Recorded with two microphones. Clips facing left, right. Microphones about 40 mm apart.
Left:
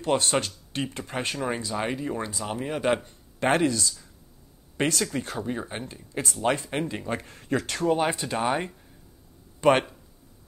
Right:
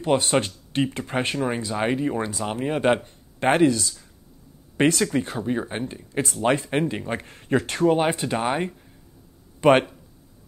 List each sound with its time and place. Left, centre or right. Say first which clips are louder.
0.0 s speech: right 3 dB; centre
0.7 s speech: right 7 dB; right
6.8 s speech: right 4 dB; centre